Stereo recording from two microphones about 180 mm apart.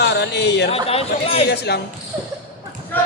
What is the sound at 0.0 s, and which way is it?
Speech, 70° left (ahead or behind).